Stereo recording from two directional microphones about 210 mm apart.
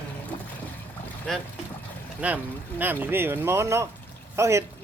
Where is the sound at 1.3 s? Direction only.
Centre (ahead or behind).